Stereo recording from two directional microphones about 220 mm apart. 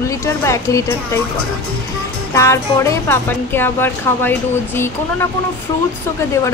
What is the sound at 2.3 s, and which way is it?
Speech, 15° left (ahead or behind).